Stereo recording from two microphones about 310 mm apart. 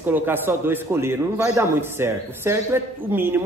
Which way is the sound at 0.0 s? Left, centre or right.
Centre.